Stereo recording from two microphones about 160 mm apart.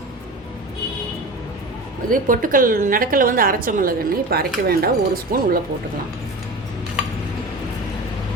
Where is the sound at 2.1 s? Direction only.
60° right (ahead or behind).